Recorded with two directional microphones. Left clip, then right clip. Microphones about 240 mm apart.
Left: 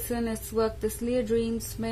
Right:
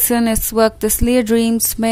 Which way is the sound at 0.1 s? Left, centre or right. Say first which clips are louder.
Right 12 dB; right.